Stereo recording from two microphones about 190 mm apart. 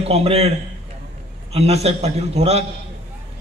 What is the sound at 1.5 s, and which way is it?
A man's voice, 35° right (ahead or behind).